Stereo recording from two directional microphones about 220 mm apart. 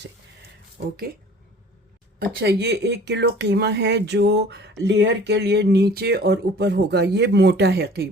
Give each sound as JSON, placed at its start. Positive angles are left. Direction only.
{"t": 2.1, "sound": "speech", "side_deg": -45}